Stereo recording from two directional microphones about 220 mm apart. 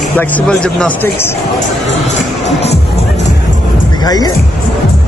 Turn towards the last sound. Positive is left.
turn(degrees=15)  # may be behind; listen again after turning